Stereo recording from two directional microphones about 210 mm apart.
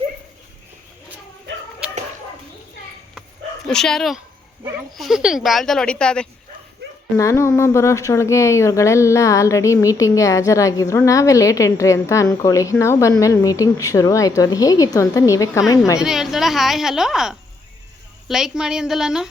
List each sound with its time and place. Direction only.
3.7 s a woman's voice: centre (ahead or behind)
16.0 s a woman's voice: centre (ahead or behind)